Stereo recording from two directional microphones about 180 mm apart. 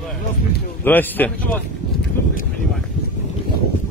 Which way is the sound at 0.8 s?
10° left (ahead or behind).